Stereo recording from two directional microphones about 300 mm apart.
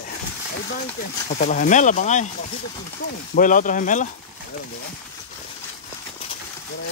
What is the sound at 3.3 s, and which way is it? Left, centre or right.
Speech, left.